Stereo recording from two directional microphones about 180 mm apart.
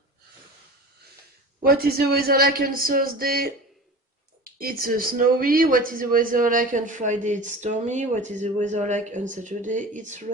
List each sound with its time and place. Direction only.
1.6 s speech: 55° right (ahead or behind)